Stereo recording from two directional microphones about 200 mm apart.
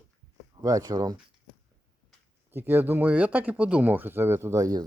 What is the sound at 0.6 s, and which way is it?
Speech, 20° right (ahead or behind).